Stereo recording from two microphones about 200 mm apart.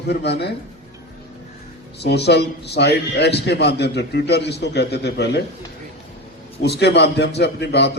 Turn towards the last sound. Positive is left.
turn(degrees=60)  # may be behind; listen again after turning